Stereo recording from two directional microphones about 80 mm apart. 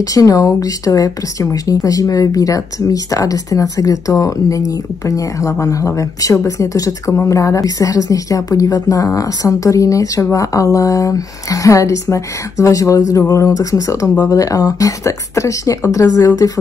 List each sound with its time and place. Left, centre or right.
0.0 s speech: left